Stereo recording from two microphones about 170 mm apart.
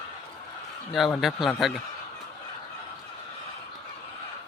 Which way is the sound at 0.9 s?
Centre (ahead or behind).